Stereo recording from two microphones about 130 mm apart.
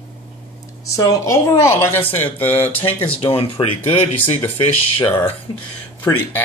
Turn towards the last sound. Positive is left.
turn(degrees=15)  # may be behind; listen again after turning